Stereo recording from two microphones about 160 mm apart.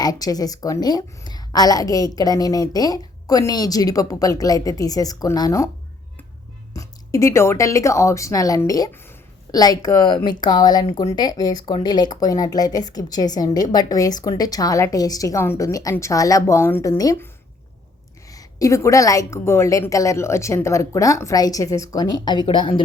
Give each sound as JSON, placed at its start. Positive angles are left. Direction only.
{"t": 0.0, "sound": "speech", "side_deg": 25}
{"t": 6.7, "sound": "speech", "side_deg": 20}
{"t": 18.3, "sound": "speech", "side_deg": 20}